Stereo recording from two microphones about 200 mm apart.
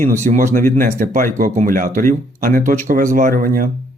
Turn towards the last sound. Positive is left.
turn(degrees=-45)  # may be behind; listen again after turning